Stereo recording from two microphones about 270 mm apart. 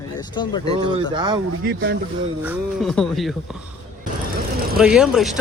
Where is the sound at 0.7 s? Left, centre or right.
Centre.